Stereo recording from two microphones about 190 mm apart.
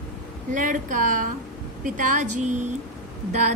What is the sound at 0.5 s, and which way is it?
A woman's voice, 40° right (ahead or behind).